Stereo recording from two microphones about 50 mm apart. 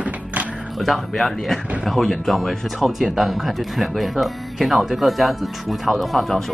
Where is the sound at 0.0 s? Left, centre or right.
Right.